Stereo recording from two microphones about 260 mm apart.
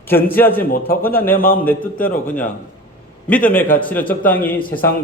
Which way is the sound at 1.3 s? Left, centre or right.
Left.